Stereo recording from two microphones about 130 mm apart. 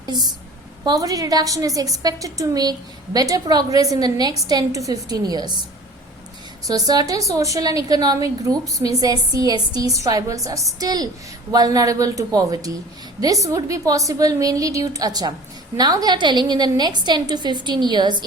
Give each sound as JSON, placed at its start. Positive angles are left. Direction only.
{"t": 0.9, "sound": "a woman's voice", "side_deg": -25}
{"t": 6.7, "sound": "a woman's voice", "side_deg": -30}